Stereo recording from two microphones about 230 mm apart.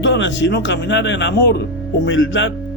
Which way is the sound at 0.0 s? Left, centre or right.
Left.